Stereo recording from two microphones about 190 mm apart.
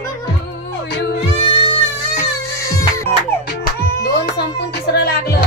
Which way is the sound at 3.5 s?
55° left (ahead or behind).